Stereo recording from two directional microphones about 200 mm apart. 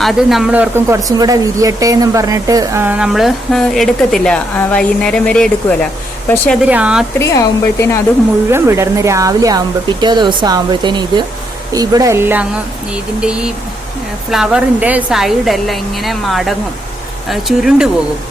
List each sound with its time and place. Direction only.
0.0 s speech: centre (ahead or behind)
6.6 s speech: 5° right (ahead or behind)
7.2 s speech: 15° left (ahead or behind)
8.4 s speech: 15° right (ahead or behind)